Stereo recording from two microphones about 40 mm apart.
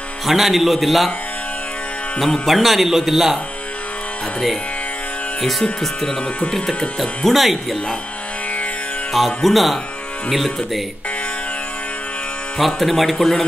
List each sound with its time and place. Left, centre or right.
0.3 s speech: centre
2.4 s speech: centre
5.4 s speech: centre
7.0 s speech: centre
9.1 s speech: centre
12.5 s speech: centre